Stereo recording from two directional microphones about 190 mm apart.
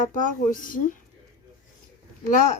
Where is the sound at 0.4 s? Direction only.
45° left (ahead or behind).